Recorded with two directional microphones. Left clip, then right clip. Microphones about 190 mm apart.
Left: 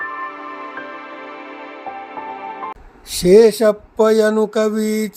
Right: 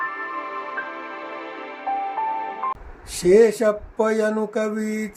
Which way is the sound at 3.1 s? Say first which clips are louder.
Left 5 dB; 50° left (ahead or behind).